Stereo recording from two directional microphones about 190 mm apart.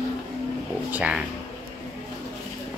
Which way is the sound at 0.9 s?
10° right (ahead or behind).